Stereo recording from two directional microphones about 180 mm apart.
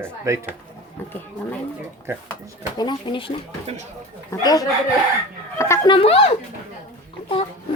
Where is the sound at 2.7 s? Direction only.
25° left (ahead or behind).